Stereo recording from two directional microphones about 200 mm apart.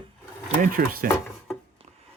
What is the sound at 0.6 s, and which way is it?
Cutlery, 45° right (ahead or behind).